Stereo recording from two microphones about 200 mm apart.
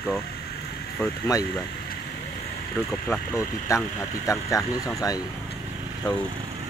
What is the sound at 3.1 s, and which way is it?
Speech, 15° left (ahead or behind).